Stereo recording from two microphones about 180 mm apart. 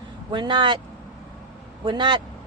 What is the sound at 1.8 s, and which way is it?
Speech, 25° right (ahead or behind).